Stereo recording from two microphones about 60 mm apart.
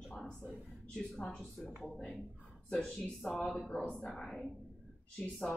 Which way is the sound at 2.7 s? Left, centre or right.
Centre.